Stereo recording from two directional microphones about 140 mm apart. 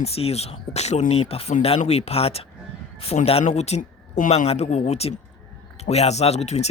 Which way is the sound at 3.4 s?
50° left (ahead or behind).